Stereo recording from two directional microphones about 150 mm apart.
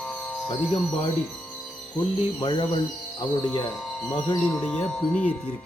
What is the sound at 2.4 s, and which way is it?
Speech, 30° left (ahead or behind).